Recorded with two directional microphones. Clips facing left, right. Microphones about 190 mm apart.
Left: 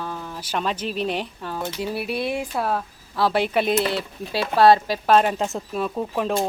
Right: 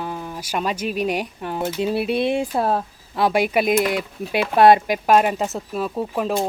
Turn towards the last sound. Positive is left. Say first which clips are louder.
# right 1 dB
turn(degrees=-5)  # may be behind; listen again after turning